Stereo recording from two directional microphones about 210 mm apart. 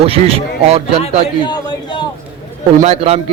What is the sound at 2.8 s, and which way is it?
Speech, 30° right (ahead or behind).